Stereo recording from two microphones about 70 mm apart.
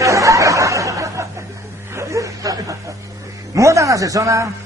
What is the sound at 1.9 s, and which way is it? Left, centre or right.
Chuckle, right.